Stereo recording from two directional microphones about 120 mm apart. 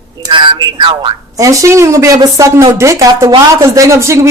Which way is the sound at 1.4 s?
25° right (ahead or behind).